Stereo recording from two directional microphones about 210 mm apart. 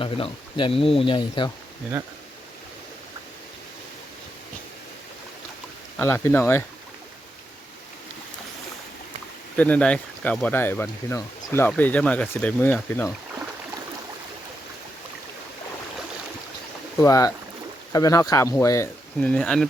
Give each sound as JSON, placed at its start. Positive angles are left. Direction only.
{"t": 0.0, "sound": "speech", "side_deg": 25}
{"t": 6.0, "sound": "speech", "side_deg": 10}
{"t": 9.6, "sound": "speech", "side_deg": 5}
{"t": 17.0, "sound": "speech", "side_deg": 15}